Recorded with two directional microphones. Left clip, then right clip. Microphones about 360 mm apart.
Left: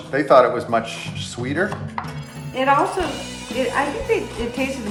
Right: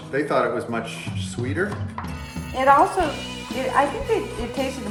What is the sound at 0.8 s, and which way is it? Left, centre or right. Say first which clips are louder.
Speech: left 3 dB; centre.